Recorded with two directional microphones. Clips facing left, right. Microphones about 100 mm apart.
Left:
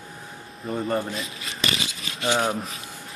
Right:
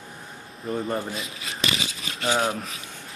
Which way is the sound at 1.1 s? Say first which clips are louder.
Left 1 dB; 30° left (ahead or behind).